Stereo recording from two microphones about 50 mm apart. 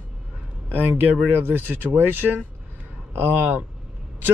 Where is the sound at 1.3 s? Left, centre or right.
Right.